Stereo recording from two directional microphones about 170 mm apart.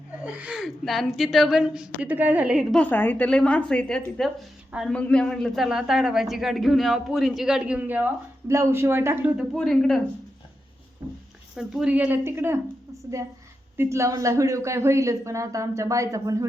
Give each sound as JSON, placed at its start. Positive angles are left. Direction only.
{"t": 0.3, "sound": "speech", "side_deg": -10}
{"t": 2.8, "sound": "a woman's voice", "side_deg": 10}
{"t": 9.6, "sound": "speech", "side_deg": 5}
{"t": 11.5, "sound": "speech", "side_deg": -5}